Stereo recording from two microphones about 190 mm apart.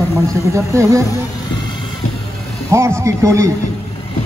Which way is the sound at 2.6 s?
15° right (ahead or behind).